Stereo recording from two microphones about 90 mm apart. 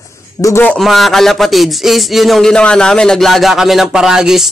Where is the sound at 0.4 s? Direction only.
30° left (ahead or behind).